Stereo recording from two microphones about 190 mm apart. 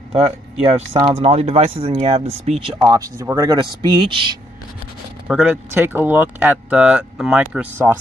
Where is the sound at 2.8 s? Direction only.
20° right (ahead or behind).